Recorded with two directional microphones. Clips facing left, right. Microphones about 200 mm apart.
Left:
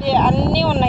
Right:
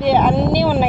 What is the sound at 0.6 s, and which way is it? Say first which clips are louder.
Speech: right 2 dB; 15° right (ahead or behind).